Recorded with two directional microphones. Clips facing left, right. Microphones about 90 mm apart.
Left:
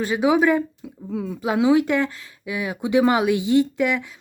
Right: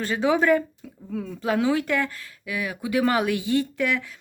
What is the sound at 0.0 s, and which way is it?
Speech, 15° left (ahead or behind).